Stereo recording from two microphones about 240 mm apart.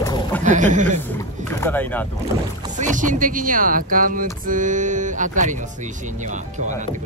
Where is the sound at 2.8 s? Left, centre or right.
Right.